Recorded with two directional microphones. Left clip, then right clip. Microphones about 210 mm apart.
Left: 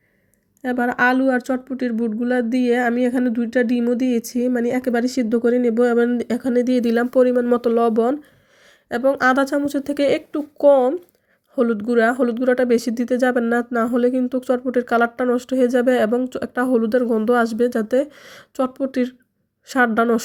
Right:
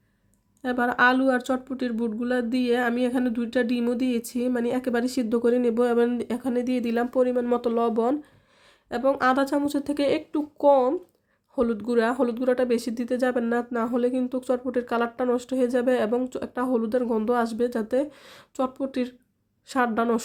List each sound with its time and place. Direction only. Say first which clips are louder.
0.6 s speech: left 3 dB; 5° left (ahead or behind)